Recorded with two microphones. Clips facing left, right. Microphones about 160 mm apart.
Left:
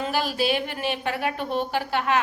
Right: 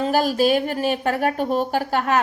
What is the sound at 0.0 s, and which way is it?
A woman's voice, 45° right (ahead or behind).